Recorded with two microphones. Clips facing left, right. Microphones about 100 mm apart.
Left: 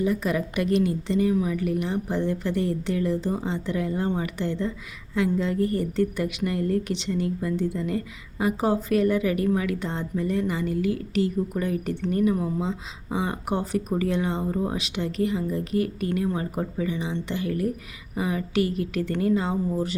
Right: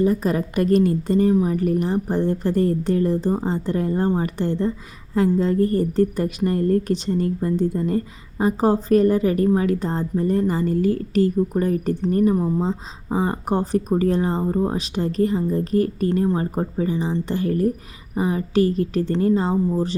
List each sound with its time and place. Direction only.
0.0 s a woman's voice: 40° right (ahead or behind)